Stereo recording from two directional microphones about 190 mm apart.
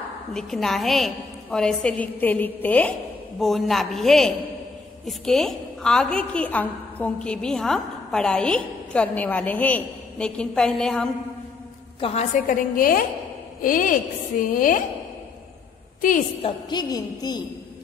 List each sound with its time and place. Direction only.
0.3 s a woman's voice: centre (ahead or behind)
12.0 s a woman's voice: 30° left (ahead or behind)
12.4 s a woman's voice: 45° left (ahead or behind)
16.4 s a woman's voice: 25° left (ahead or behind)